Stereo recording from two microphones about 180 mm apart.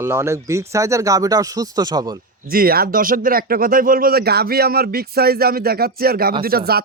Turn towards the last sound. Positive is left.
turn(degrees=-60)  # may be behind; listen again after turning